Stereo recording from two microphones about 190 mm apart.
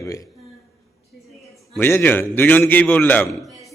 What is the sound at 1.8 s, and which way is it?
A man's voice, 10° left (ahead or behind).